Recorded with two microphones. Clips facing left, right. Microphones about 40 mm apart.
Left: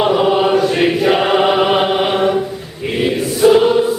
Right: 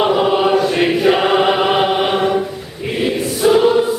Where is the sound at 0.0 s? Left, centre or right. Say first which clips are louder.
Left 1 dB; centre.